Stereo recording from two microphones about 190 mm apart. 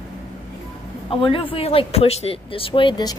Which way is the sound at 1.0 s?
30° left (ahead or behind).